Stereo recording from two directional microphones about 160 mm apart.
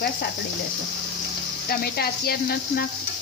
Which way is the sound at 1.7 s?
75° left (ahead or behind).